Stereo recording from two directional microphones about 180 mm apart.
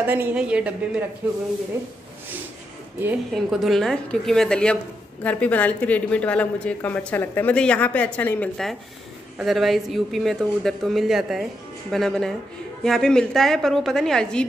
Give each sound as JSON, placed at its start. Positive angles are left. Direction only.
{"t": 0.0, "sound": "a woman's voice", "side_deg": -10}
{"t": 3.3, "sound": "a man's voice", "side_deg": 0}